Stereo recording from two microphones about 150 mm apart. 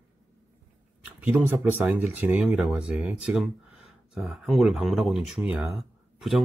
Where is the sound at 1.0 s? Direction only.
10° right (ahead or behind).